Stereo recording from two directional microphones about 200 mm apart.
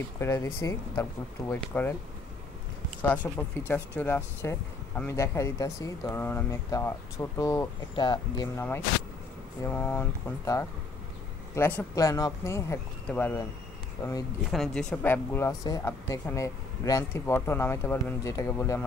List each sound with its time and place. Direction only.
0.2 s speech: 15° left (ahead or behind)
3.3 s speech: 10° left (ahead or behind)
9.7 s speech: 10° left (ahead or behind)
14.5 s speech: centre (ahead or behind)